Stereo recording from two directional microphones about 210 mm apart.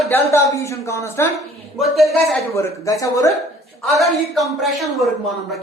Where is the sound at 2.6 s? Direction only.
15° left (ahead or behind).